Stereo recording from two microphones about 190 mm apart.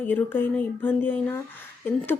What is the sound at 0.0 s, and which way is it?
Speech, 10° left (ahead or behind).